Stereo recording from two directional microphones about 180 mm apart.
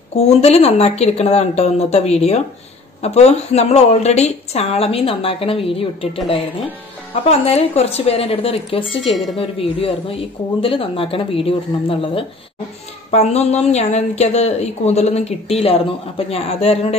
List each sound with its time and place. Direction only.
0.1 s a woman's voice: 35° left (ahead or behind)
7.2 s a woman's voice: 35° left (ahead or behind)
9.0 s speech: centre (ahead or behind)
9.4 s a woman's voice: 30° left (ahead or behind)